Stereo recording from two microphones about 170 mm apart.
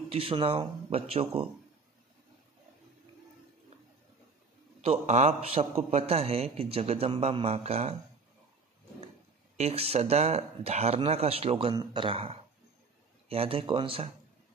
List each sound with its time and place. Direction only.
0.1 s a man's voice: 30° right (ahead or behind)
4.8 s a man's voice: 35° right (ahead or behind)
9.6 s a man's voice: 35° right (ahead or behind)